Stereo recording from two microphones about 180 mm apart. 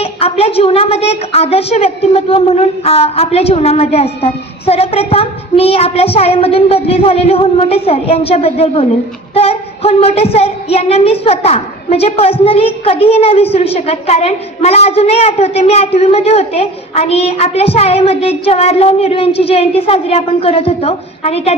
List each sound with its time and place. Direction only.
0.0 s a woman's voice: 35° left (ahead or behind)